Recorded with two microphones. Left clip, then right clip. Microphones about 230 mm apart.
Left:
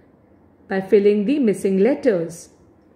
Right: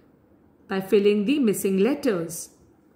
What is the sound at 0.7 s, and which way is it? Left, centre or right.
Speech, right.